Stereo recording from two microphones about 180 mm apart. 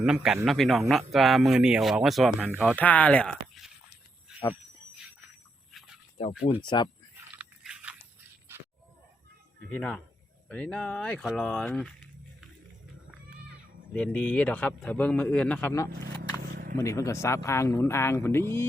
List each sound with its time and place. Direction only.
0.0 s a man's voice: 5° right (ahead or behind)
3.5 s a sound: centre (ahead or behind)
5.7 s a sound: centre (ahead or behind)
6.5 s speech: 25° left (ahead or behind)
7.3 s biting: 5° right (ahead or behind)
9.7 s speech: 5° left (ahead or behind)
13.9 s a man's voice: 5° left (ahead or behind)